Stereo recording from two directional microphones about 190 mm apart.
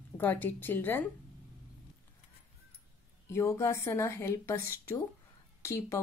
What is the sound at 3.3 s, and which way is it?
Speech, 15° left (ahead or behind).